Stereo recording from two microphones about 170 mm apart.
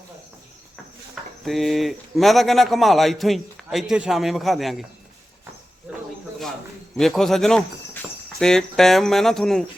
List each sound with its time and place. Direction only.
1.5 s a man's voice: centre (ahead or behind)
5.9 s a sound: 5° right (ahead or behind)
6.9 s a man's voice: centre (ahead or behind)